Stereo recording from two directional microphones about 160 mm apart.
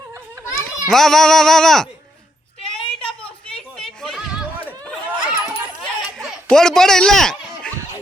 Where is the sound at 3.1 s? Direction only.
5° left (ahead or behind).